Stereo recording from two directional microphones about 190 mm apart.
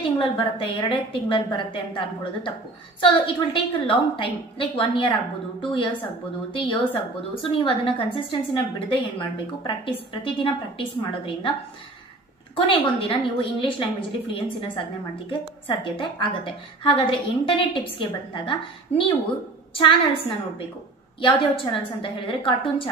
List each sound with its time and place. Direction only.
0.2 s a woman's voice: 25° left (ahead or behind)
12.5 s a woman's voice: 25° left (ahead or behind)
21.2 s a woman's voice: 25° left (ahead or behind)